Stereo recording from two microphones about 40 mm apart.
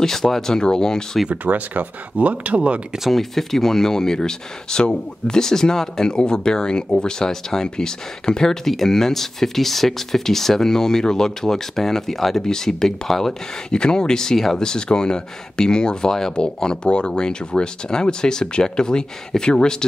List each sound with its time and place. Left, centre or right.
0.0 s speech: centre
1.3 s speech: right
3.1 s speech: centre